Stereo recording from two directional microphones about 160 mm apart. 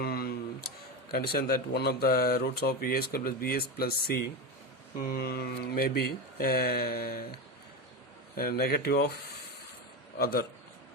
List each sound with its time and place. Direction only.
0.0 s a sound: 70° left (ahead or behind)
1.1 s speech: 70° left (ahead or behind)
8.4 s speech: 65° left (ahead or behind)
10.2 s speech: 75° left (ahead or behind)